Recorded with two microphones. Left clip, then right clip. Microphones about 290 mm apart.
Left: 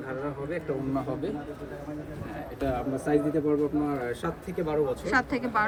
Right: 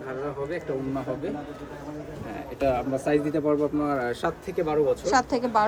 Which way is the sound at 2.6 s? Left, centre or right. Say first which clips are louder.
Right 6 dB; centre.